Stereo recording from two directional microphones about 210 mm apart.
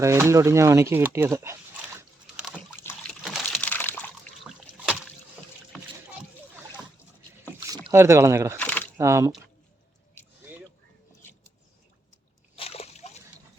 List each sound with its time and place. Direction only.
0.0 s speech: 15° right (ahead or behind)
3.5 s a sound: 5° left (ahead or behind)
7.7 s speech: 20° right (ahead or behind)
8.5 s a sound: 5° left (ahead or behind)
9.0 s speech: 15° right (ahead or behind)
12.5 s splash: 30° left (ahead or behind)